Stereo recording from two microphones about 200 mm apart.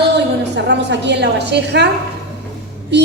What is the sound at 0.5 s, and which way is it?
A woman's voice, 60° right (ahead or behind).